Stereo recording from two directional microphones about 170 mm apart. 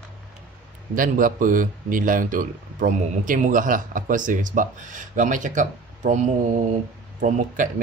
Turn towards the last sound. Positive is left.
turn(degrees=-50)  # may be behind; listen again after turning